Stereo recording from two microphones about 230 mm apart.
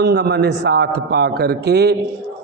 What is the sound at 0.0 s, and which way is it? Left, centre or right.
A man's voice, right.